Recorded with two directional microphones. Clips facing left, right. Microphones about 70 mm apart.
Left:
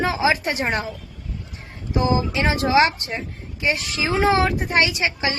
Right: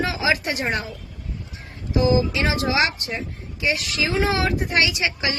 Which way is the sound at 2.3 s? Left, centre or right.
Left.